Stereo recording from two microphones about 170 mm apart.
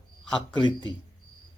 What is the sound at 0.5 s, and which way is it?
Speech, 25° left (ahead or behind).